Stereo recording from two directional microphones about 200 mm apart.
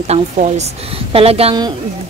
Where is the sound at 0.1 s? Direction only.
35° right (ahead or behind).